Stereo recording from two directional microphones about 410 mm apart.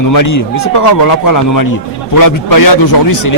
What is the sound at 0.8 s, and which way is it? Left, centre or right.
Speech, left.